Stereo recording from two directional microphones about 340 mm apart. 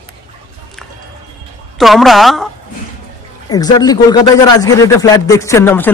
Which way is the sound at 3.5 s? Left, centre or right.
Centre.